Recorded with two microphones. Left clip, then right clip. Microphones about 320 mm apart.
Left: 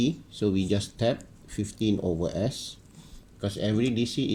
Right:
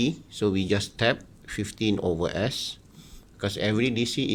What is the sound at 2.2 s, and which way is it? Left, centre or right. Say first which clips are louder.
Speech: right 3 dB; right.